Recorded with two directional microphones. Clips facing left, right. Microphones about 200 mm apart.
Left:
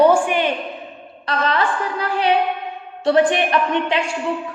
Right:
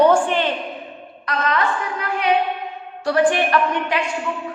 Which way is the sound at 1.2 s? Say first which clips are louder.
Left 1 dB; 30° left (ahead or behind).